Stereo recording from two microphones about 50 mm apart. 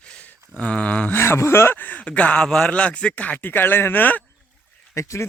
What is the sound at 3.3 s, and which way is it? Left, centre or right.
Speech, left.